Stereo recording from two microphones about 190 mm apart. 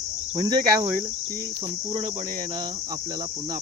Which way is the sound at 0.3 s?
20° right (ahead or behind).